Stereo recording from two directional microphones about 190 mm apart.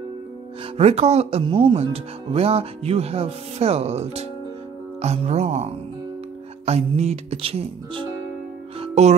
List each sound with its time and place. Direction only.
0.7 s speech: 35° right (ahead or behind)
8.7 s music: 35° right (ahead or behind)